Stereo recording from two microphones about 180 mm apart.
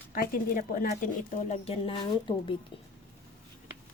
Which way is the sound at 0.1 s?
50° left (ahead or behind).